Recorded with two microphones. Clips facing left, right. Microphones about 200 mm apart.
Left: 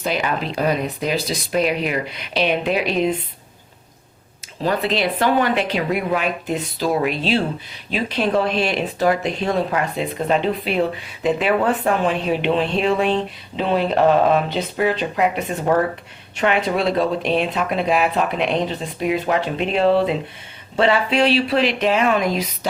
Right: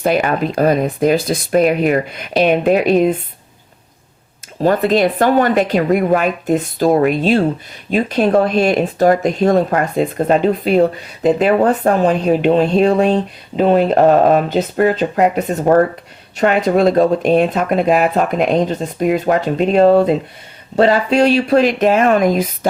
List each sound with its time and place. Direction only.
0.0 s speech: 50° right (ahead or behind)
4.6 s speech: 45° right (ahead or behind)